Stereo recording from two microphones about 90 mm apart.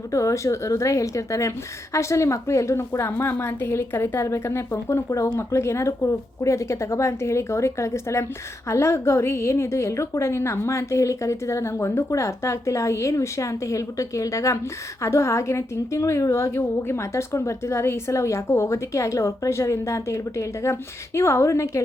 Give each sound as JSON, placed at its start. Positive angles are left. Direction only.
{"t": 0.1, "sound": "a woman's voice", "side_deg": 35}